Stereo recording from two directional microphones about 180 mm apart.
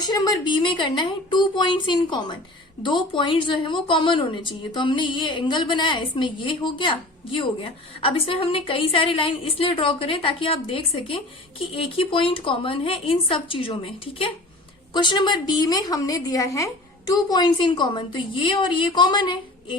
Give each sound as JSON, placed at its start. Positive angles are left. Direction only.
{"t": 0.0, "sound": "a woman's voice", "side_deg": 25}